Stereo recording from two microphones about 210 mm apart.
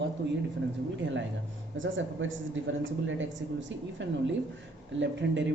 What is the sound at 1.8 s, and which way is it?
A woman's voice, 65° right (ahead or behind).